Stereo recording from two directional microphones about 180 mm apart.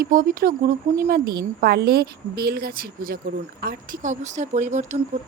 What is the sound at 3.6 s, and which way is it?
Speech, 45° right (ahead or behind).